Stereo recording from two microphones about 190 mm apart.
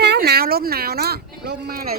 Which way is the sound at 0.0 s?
60° right (ahead or behind).